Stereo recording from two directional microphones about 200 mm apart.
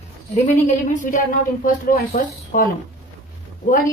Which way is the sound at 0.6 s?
40° left (ahead or behind).